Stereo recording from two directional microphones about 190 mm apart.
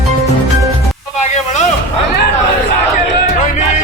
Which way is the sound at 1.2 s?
40° left (ahead or behind).